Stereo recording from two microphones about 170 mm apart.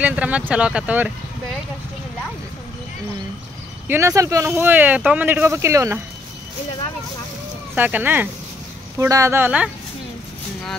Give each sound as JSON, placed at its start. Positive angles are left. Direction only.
{"t": 0.0, "sound": "speech", "side_deg": -10}
{"t": 3.8, "sound": "speech", "side_deg": -15}
{"t": 7.7, "sound": "speech", "side_deg": -10}